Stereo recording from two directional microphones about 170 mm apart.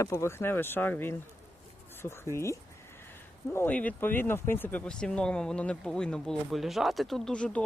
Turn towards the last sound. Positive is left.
turn(degrees=5)  # may be behind; listen again after turning